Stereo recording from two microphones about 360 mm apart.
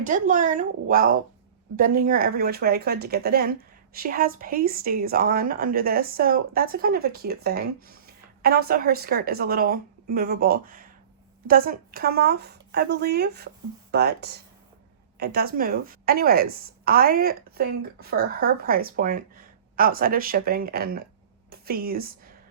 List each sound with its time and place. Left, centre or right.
0.0 s a woman's voice: right